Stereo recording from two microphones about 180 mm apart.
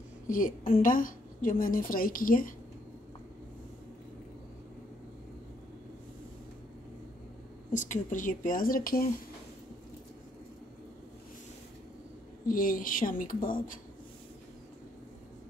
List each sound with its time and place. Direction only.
0.3 s a woman's voice: 50° left (ahead or behind)
7.7 s a woman's voice: 45° left (ahead or behind)
12.4 s a woman's voice: 50° left (ahead or behind)